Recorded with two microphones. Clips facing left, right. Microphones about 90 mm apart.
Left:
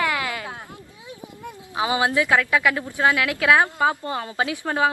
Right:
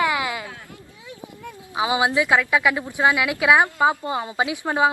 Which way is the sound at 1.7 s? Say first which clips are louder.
Right 1 dB; 15° right (ahead or behind).